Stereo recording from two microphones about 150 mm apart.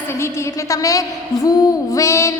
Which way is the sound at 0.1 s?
15° left (ahead or behind).